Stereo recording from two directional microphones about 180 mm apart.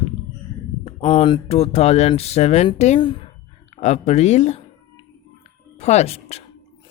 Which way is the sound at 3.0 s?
25° left (ahead or behind).